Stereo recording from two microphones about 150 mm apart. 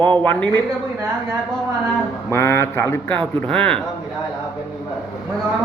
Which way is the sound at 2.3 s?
15° left (ahead or behind).